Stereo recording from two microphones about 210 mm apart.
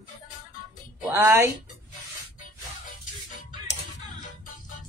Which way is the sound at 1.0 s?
10° right (ahead or behind).